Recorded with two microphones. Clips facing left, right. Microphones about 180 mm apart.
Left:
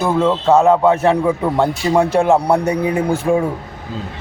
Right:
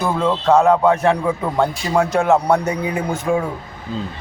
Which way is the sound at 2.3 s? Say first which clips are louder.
Left 1 dB; 10° left (ahead or behind).